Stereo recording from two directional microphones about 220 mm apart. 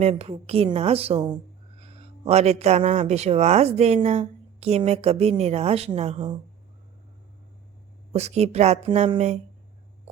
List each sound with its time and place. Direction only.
0.0 s speech: 30° right (ahead or behind)
8.1 s speech: 30° right (ahead or behind)